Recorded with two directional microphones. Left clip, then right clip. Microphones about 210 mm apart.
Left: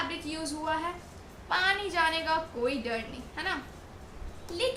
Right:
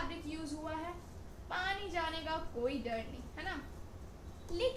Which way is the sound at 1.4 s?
25° left (ahead or behind).